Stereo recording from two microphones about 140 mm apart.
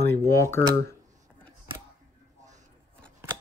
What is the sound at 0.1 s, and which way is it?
Speech, 20° left (ahead or behind).